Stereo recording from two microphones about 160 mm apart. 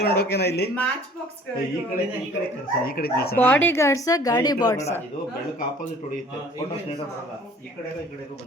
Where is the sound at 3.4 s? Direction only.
10° left (ahead or behind).